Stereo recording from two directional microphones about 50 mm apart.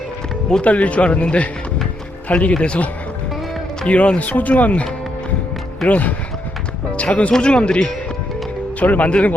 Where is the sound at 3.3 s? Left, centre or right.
Centre.